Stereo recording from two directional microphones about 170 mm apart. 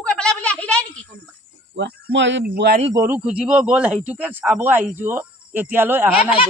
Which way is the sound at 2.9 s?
10° right (ahead or behind).